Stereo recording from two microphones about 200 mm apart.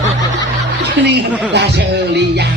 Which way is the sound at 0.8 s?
60° right (ahead or behind).